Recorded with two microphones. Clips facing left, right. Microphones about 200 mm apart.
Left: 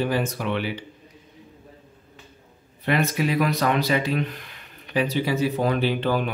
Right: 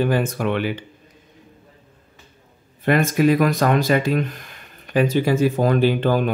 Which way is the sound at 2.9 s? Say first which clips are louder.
Right 6 dB; 45° right (ahead or behind).